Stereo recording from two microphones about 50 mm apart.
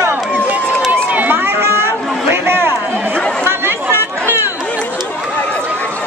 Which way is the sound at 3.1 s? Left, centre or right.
Centre.